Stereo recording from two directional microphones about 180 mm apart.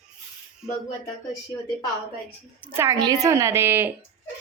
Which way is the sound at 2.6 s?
15° right (ahead or behind).